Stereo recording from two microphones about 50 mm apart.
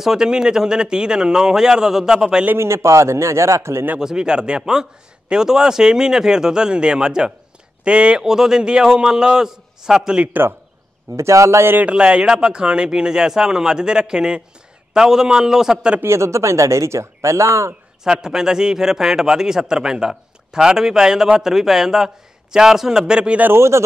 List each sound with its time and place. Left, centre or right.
0.0 s a man's voice: centre
2.6 s speech: right
4.0 s a man's voice: centre
11.1 s a man's voice: right
11.8 s a man's voice: right
16.0 s speech: right
18.0 s a man's voice: centre
23.5 s speech: right